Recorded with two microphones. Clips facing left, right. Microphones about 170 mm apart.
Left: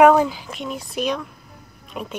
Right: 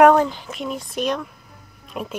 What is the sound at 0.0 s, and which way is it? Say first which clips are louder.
Speech: even; 5° left (ahead or behind).